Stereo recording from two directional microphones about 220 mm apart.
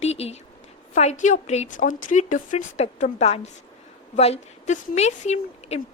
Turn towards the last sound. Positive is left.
turn(degrees=30)  # may be behind; listen again after turning